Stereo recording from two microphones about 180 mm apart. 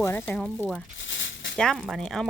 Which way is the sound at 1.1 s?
90° left.